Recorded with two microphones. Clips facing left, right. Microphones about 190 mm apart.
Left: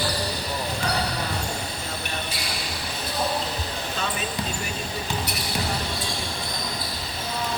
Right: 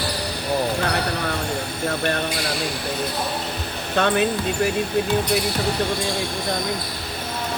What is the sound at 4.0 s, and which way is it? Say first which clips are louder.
Speech: right 13 dB; 70° right (ahead or behind).